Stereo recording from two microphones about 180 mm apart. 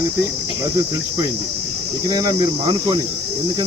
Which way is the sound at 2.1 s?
20° right (ahead or behind).